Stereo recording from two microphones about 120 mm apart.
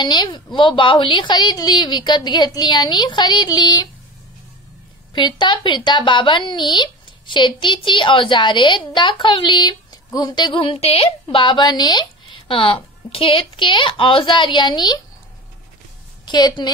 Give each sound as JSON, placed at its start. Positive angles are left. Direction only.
{"t": 0.0, "sound": "a woman's voice", "side_deg": 40}
{"t": 5.1, "sound": "a woman's voice", "side_deg": 40}
{"t": 16.3, "sound": "a woman's voice", "side_deg": 35}